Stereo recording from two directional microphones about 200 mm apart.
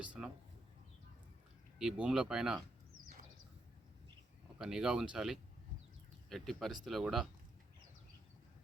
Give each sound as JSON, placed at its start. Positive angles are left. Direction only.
{"t": 0.2, "sound": "speech", "side_deg": -5}
{"t": 1.8, "sound": "speech", "side_deg": -5}
{"t": 4.5, "sound": "speech", "side_deg": -5}